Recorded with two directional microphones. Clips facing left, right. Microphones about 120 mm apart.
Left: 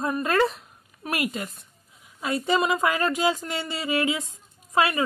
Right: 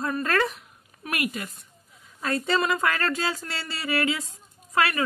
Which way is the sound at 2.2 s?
15° left (ahead or behind).